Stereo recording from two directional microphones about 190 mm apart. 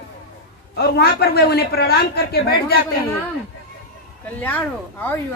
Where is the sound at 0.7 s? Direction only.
55° left (ahead or behind).